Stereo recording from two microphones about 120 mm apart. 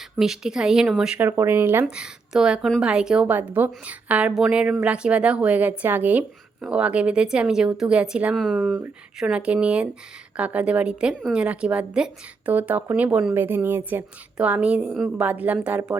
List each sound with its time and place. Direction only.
0.2 s speech: 5° right (ahead or behind)
1.4 s a woman's voice: 20° right (ahead or behind)
2.0 s a woman's voice: 5° right (ahead or behind)
8.5 s a woman's voice: 15° right (ahead or behind)